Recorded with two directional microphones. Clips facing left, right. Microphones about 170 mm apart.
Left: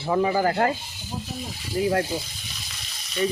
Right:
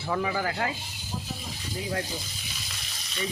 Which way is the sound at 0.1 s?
30° left (ahead or behind).